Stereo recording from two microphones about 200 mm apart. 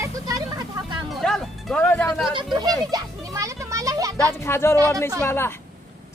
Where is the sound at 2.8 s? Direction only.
15° right (ahead or behind).